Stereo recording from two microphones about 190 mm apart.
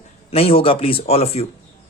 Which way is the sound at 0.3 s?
30° left (ahead or behind).